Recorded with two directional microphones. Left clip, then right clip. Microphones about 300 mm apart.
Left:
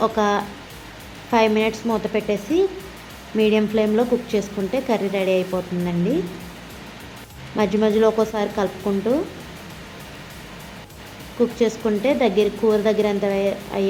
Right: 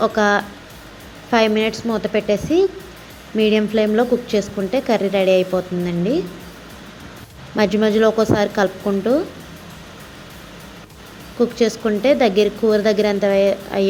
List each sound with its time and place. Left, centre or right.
0.0 s a woman's voice: centre
7.5 s a woman's voice: centre
11.5 s a woman's voice: centre